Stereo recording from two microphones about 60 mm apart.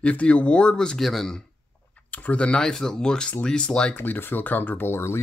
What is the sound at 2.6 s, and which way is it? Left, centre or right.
Speech, centre.